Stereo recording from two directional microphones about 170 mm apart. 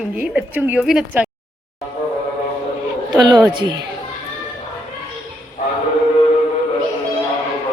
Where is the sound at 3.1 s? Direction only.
25° right (ahead or behind).